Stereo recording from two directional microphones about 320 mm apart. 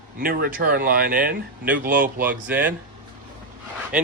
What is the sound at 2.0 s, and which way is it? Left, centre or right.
Speech, centre.